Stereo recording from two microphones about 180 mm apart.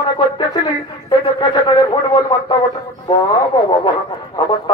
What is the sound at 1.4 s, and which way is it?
Speech, 25° left (ahead or behind).